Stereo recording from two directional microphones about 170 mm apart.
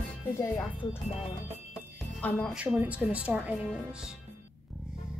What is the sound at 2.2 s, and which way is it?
Speech, 10° left (ahead or behind).